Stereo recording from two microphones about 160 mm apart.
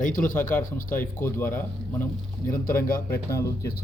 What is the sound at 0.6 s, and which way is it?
Speech, 60° left (ahead or behind).